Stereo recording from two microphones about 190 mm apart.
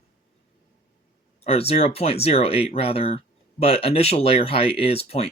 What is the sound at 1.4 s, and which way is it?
Speech, 30° left (ahead or behind).